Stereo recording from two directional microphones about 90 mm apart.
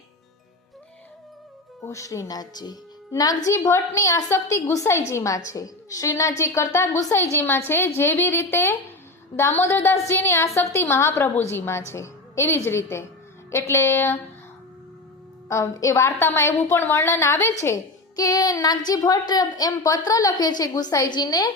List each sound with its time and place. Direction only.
1.8 s a woman's voice: 35° left (ahead or behind)
15.4 s a woman's voice: 35° left (ahead or behind)
18.2 s a woman's voice: 45° left (ahead or behind)